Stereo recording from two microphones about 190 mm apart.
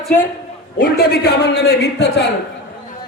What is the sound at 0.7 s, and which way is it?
Speech, 50° left (ahead or behind).